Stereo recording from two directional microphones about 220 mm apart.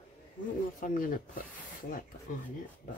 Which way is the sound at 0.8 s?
40° left (ahead or behind).